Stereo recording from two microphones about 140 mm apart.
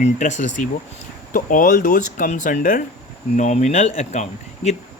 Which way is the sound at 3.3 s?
55° left (ahead or behind).